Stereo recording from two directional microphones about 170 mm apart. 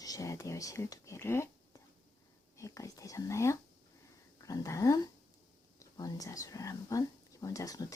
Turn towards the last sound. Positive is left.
turn(degrees=20)  # may be behind; listen again after turning